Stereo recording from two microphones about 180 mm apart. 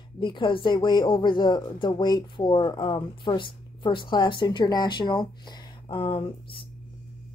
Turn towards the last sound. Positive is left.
turn(degrees=30)  # may be behind; listen again after turning